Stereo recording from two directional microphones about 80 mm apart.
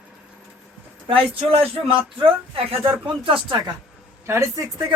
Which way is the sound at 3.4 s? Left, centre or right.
Right.